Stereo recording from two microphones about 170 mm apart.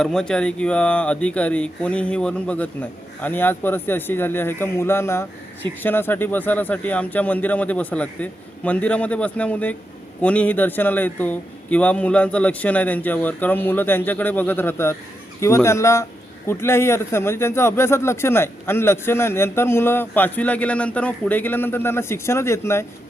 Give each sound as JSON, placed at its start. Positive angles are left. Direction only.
{"t": 0.0, "sound": "a man's voice", "side_deg": 5}